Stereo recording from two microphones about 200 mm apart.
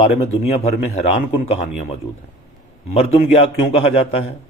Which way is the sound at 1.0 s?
30° left (ahead or behind).